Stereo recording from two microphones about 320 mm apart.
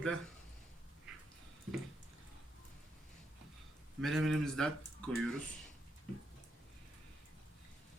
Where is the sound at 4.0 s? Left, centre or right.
Centre.